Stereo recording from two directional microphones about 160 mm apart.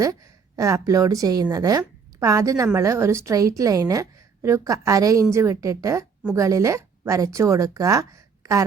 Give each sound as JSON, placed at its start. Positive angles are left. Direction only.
{"t": 0.0, "sound": "a woman's voice", "side_deg": -20}